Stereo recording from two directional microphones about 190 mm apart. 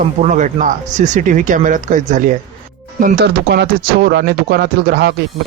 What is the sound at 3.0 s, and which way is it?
Speech, 55° right (ahead or behind).